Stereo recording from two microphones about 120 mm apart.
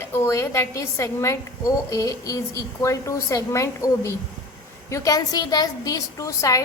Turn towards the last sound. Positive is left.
turn(degrees=30)  # may be behind; listen again after turning